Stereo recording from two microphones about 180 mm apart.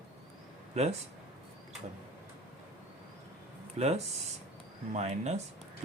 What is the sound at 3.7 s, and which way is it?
Speech, 35° right (ahead or behind).